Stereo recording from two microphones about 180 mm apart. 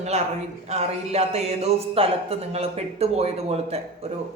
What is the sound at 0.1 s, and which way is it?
A man's voice, 35° right (ahead or behind).